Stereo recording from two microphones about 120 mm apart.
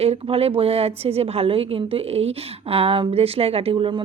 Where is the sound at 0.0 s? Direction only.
55° right (ahead or behind).